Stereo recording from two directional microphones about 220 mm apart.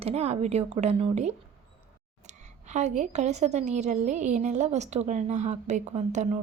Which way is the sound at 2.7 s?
30° right (ahead or behind).